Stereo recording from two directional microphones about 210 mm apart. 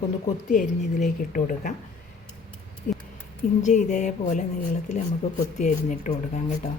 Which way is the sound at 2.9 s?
40° left (ahead or behind).